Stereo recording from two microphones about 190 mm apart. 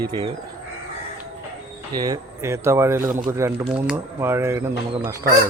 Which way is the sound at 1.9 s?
20° right (ahead or behind).